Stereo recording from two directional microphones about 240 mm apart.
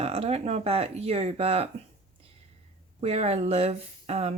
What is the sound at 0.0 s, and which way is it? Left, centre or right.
Speech, right.